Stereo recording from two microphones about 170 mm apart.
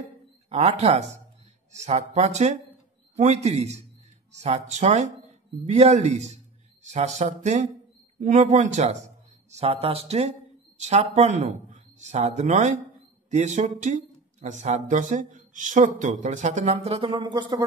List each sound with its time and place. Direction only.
0.5 s a man's voice: 40° right (ahead or behind)
17.1 s speech: 25° right (ahead or behind)